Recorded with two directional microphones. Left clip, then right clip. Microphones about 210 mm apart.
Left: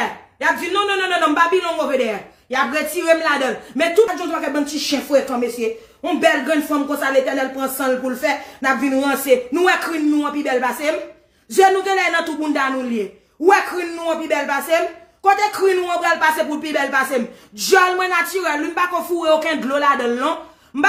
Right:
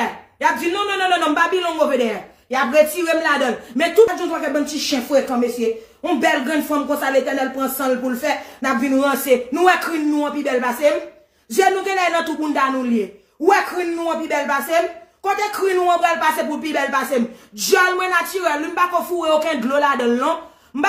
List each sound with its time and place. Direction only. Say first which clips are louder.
0.4 s a man's voice: left 1 dB; 15° left (ahead or behind)